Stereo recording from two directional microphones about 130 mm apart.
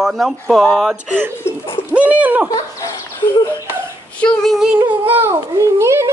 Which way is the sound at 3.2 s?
40° left (ahead or behind).